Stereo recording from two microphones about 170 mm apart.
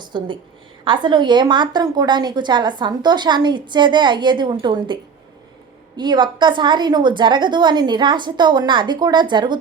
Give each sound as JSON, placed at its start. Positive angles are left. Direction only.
{"t": 0.0, "sound": "a woman's voice", "side_deg": -25}
{"t": 6.0, "sound": "a woman's voice", "side_deg": -25}